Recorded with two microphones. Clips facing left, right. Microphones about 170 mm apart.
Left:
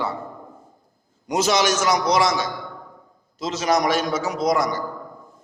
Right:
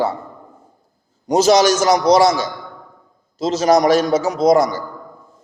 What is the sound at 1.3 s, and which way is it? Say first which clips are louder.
A man's voice: right 7 dB; 35° right (ahead or behind).